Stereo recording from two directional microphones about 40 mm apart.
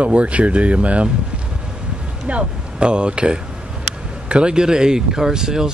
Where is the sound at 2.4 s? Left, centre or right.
Right.